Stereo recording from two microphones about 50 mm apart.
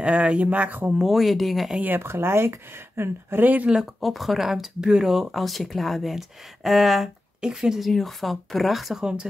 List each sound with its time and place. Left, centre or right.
0.0 s speech: right
0.9 s speech: centre
1.8 s speech: right
2.0 s speech: right
3.4 s speech: right
3.8 s speech: centre
7.4 s speech: centre
7.8 s speech: centre
9.0 s speech: centre